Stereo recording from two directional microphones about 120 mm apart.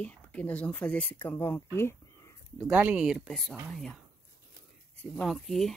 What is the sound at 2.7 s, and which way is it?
Speech, 10° right (ahead or behind).